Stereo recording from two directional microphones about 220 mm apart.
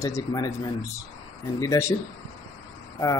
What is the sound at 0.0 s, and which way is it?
Speech, 15° left (ahead or behind).